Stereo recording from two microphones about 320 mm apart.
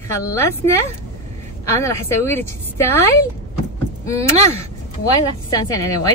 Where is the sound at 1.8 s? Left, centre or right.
Centre.